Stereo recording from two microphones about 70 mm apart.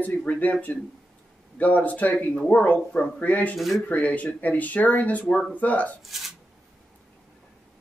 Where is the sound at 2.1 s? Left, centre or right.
Centre.